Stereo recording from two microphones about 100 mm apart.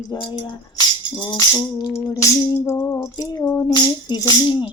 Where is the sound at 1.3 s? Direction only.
30° left (ahead or behind).